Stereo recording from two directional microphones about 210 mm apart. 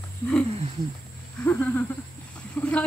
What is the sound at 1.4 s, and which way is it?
Speech, 10° left (ahead or behind).